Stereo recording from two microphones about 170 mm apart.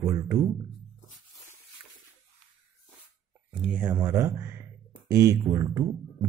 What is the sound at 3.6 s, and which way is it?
Speech, 10° right (ahead or behind).